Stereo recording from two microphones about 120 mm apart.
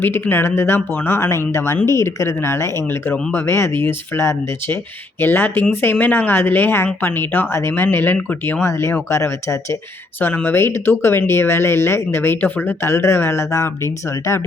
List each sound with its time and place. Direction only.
0.0 s speech: 20° left (ahead or behind)